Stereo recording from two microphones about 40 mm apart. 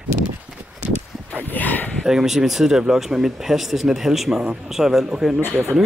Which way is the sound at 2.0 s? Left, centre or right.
Centre.